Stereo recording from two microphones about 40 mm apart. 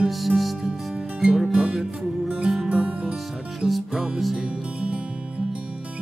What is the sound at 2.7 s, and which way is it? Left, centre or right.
Music, right.